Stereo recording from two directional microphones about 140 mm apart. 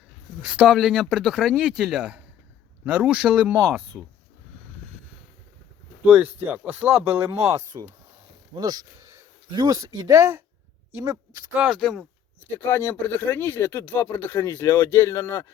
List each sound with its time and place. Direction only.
0.4 s speech: 5° right (ahead or behind)
6.1 s speech: 10° right (ahead or behind)
11.6 s speech: centre (ahead or behind)
12.5 s speech: 15° left (ahead or behind)